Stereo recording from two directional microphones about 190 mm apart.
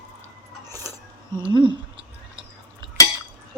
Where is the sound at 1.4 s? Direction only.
25° right (ahead or behind).